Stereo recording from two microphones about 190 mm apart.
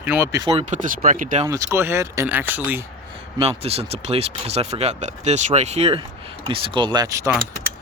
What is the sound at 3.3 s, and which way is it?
Speech, 30° right (ahead or behind).